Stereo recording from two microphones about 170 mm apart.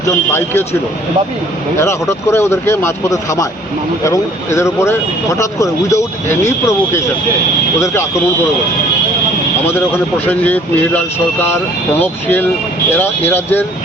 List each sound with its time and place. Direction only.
0.3 s speech: 15° left (ahead or behind)
1.8 s speech: 15° left (ahead or behind)
10.2 s speech: 10° left (ahead or behind)